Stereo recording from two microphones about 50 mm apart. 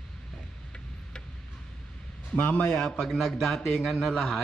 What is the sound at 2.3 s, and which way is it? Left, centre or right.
Speech, left.